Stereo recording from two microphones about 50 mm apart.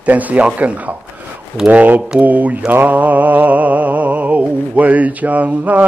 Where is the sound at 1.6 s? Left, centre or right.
Right.